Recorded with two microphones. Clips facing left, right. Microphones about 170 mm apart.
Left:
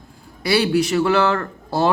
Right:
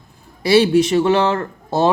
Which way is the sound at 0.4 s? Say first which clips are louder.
Right 5 dB; 30° right (ahead or behind).